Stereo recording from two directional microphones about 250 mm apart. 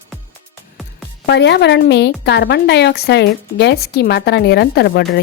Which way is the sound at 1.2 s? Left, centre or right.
Left.